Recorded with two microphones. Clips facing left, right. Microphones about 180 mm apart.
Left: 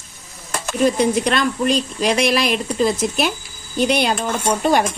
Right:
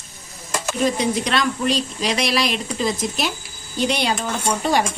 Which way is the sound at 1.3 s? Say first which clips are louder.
Left 3 dB; 50° left (ahead or behind).